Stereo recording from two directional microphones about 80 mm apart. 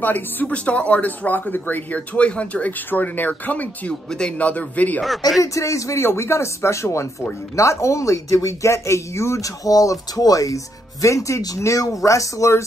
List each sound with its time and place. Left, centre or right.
0.0 s a man's voice: left
5.4 s speech: left